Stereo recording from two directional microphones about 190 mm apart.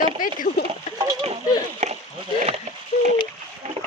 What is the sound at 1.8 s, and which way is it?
Rowboat, 35° right (ahead or behind).